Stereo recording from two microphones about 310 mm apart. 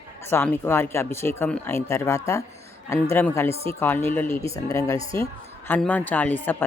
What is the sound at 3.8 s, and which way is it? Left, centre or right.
A woman's voice, centre.